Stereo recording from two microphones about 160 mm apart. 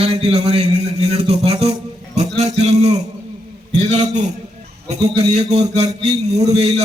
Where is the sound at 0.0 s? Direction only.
40° right (ahead or behind).